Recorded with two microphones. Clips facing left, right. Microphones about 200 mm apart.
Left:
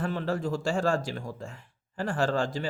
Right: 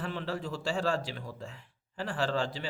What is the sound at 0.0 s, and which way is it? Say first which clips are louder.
Speech: left 6 dB; 45° left (ahead or behind).